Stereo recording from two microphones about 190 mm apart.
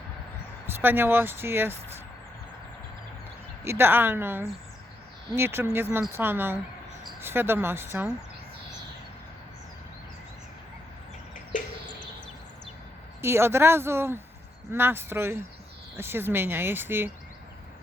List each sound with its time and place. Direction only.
0.7 s speech: 10° right (ahead or behind)
3.6 s speech: 10° right (ahead or behind)
13.2 s speech: 10° right (ahead or behind)